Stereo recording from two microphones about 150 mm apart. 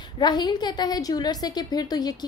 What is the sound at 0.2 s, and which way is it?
A woman's voice, 30° left (ahead or behind).